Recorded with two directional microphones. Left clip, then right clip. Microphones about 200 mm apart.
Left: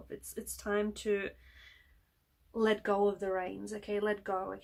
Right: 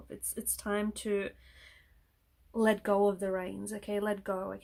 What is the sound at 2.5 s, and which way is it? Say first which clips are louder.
Speech: right 2 dB; 50° right (ahead or behind).